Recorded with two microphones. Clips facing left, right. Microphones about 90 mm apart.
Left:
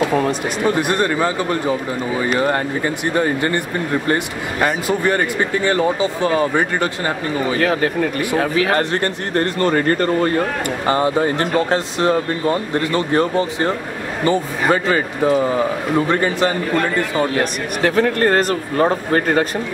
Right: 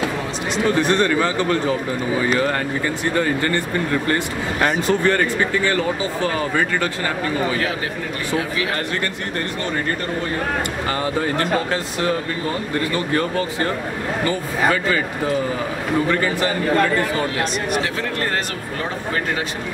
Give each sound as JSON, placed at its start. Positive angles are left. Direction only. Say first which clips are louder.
{"t": 0.7, "sound": "speech", "louder": "even", "side_deg": 15}
{"t": 4.6, "sound": "speech", "louder": "left 1 dB", "side_deg": 5}
{"t": 5.0, "sound": "speech", "louder": "even", "side_deg": 15}
{"t": 7.6, "sound": "speech", "louder": "left 7 dB", "side_deg": 55}
{"t": 8.4, "sound": "speech", "louder": "left 8 dB", "side_deg": 45}
{"t": 10.9, "sound": "speech", "louder": "left 7 dB", "side_deg": 25}
{"t": 17.4, "sound": "speech", "louder": "left 2 dB", "side_deg": 50}